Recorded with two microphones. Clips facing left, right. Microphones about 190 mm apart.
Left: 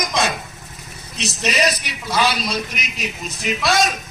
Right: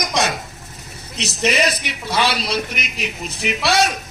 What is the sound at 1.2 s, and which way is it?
A man's voice, 55° right (ahead or behind).